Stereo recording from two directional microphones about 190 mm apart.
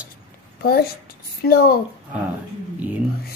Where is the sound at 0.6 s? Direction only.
55° left (ahead or behind).